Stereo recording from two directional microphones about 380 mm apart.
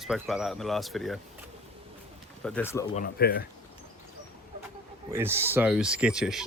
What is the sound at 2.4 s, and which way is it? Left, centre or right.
Speech, centre.